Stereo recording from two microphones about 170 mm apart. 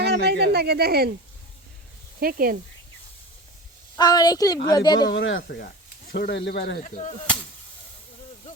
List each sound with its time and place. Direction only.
0.0 s a sound: 75° right (ahead or behind)
2.2 s speech: 55° right (ahead or behind)
3.9 s a woman's voice: 25° left (ahead or behind)
5.0 s speech: 85° left; by 6.8 s 70° left (ahead or behind)
6.8 s whip: 45° left (ahead or behind)